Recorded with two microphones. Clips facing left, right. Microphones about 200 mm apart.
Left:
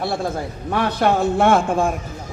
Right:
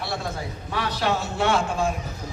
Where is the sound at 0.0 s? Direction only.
50° left (ahead or behind).